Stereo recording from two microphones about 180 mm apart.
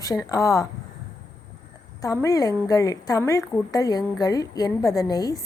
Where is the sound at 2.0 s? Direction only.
20° left (ahead or behind).